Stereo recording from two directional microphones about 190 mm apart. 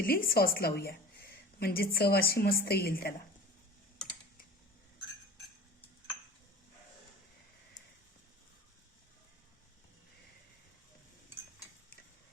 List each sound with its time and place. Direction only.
0.0 s a woman's voice: 50° left (ahead or behind)